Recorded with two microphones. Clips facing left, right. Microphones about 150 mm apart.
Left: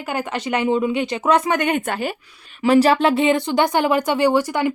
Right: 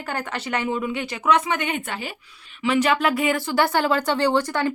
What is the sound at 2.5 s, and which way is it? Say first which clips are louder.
Speech: left 6 dB; 40° left (ahead or behind).